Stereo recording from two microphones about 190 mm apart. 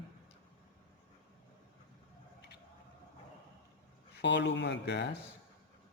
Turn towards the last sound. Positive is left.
turn(degrees=65)  # may be behind; listen again after turning